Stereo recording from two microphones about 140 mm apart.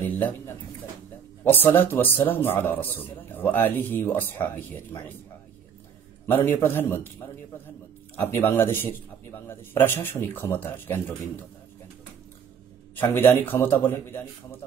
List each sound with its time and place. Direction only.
1.4 s a man's voice: 15° left (ahead or behind)
6.3 s a man's voice: 15° left (ahead or behind)
8.2 s a man's voice: 15° left (ahead or behind)
13.1 s a man's voice: 15° left (ahead or behind)